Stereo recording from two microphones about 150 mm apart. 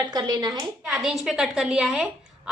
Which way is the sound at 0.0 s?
30° right (ahead or behind).